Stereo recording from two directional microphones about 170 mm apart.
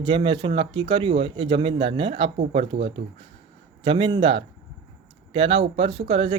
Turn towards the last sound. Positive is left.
turn(degrees=-35)  # may be behind; listen again after turning